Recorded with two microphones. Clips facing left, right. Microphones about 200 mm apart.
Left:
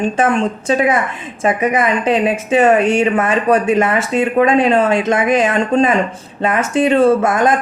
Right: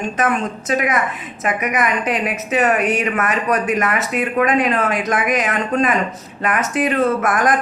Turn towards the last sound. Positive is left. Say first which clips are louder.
# left 5 dB
turn(degrees=25)  # may be behind; listen again after turning